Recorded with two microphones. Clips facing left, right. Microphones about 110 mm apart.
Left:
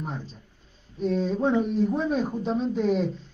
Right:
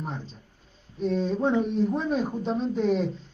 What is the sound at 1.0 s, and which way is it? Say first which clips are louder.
Speech: left 1 dB; centre (ahead or behind).